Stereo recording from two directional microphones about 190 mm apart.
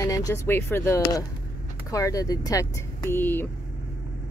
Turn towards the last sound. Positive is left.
turn(degrees=10)  # may be behind; listen again after turning